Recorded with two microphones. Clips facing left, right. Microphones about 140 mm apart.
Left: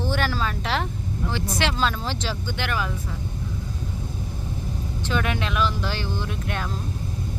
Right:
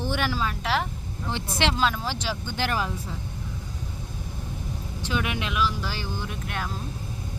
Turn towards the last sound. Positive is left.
turn(degrees=-5)  # may be behind; listen again after turning